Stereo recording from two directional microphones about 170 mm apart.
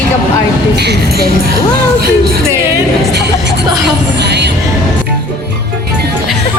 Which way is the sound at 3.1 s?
85° right.